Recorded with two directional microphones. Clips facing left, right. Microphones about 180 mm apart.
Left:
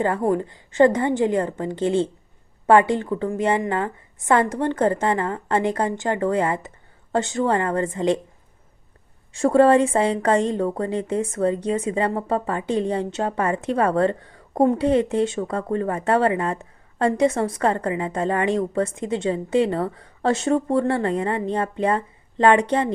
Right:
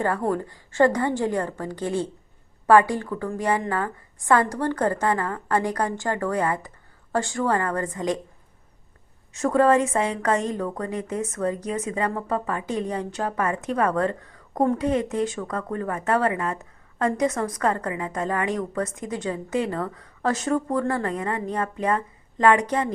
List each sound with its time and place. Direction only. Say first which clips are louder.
0.0 s a woman's voice: left 3 dB; 20° left (ahead or behind)
9.3 s a woman's voice: left 4 dB; 30° left (ahead or behind)